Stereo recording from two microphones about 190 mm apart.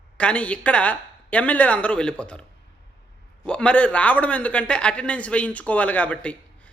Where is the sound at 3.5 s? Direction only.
5° left (ahead or behind).